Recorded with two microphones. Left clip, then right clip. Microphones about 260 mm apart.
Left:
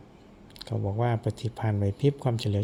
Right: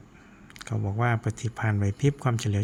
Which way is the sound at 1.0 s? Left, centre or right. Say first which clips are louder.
Right 2 dB; centre.